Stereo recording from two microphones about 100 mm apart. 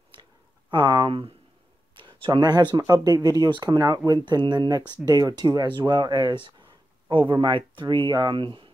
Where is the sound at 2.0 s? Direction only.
55° right (ahead or behind).